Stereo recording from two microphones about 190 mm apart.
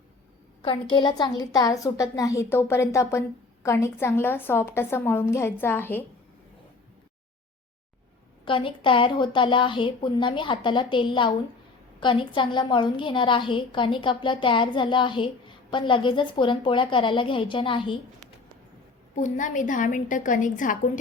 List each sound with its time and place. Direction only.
0.6 s a woman's voice: 25° left (ahead or behind); by 6.1 s 10° left (ahead or behind)
8.4 s a woman's voice: 25° left (ahead or behind)
19.1 s a woman's voice: 40° left (ahead or behind)